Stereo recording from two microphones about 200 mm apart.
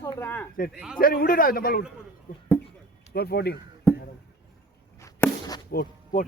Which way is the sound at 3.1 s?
55° left (ahead or behind).